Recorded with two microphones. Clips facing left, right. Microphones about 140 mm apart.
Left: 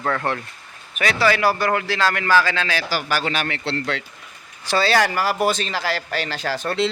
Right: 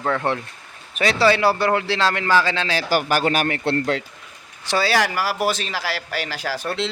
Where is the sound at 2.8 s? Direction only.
50° right (ahead or behind).